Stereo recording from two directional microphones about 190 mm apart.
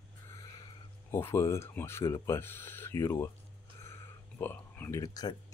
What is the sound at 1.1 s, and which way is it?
Speech, 15° left (ahead or behind).